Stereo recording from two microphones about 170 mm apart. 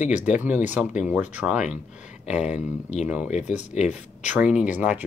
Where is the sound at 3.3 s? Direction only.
45° left (ahead or behind).